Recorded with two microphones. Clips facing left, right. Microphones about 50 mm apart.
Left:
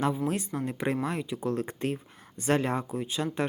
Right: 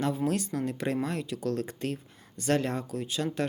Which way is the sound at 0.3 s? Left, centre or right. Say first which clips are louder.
Right 1 dB; left.